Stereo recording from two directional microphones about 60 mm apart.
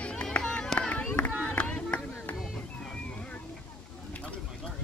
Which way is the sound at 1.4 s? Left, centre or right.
Left.